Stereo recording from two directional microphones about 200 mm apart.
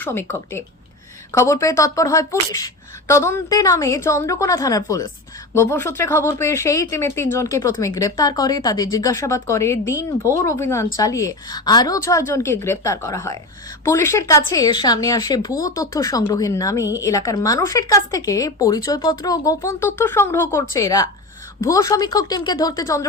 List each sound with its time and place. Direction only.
0.0 s speech: 10° left (ahead or behind)